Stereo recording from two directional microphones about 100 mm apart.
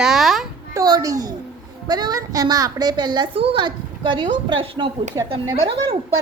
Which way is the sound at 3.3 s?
60° right (ahead or behind).